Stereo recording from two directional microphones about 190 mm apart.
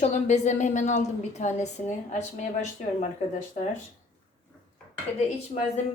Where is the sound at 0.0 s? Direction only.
35° left (ahead or behind).